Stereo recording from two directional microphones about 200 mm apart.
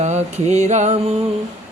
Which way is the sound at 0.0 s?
35° right (ahead or behind).